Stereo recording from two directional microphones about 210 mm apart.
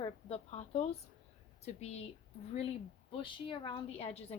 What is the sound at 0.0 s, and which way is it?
A woman's voice, 30° left (ahead or behind).